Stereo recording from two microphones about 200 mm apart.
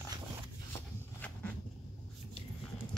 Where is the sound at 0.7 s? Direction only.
10° left (ahead or behind).